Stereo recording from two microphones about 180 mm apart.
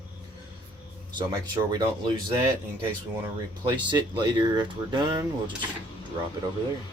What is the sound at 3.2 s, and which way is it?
Speech, 25° right (ahead or behind).